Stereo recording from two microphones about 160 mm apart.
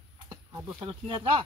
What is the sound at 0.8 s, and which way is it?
Speech, 35° right (ahead or behind).